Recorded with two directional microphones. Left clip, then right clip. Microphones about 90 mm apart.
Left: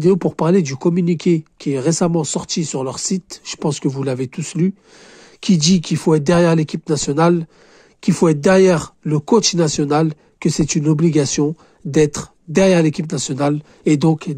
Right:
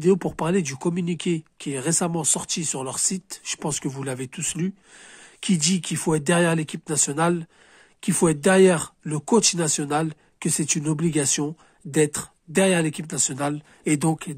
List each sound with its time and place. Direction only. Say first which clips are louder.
0.0 s speech: left 6 dB; 20° left (ahead or behind)
10.4 s speech: left 7 dB; 20° left (ahead or behind)